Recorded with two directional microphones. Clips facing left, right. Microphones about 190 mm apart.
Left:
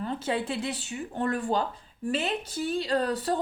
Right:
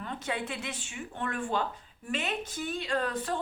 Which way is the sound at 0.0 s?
35° left (ahead or behind).